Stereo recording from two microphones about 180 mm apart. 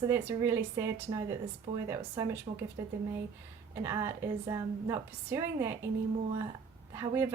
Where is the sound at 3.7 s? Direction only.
15° right (ahead or behind).